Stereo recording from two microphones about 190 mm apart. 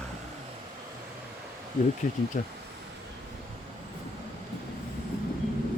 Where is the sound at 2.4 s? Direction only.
45° left (ahead or behind).